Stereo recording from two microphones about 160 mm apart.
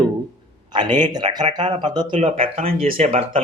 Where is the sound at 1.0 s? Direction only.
25° right (ahead or behind).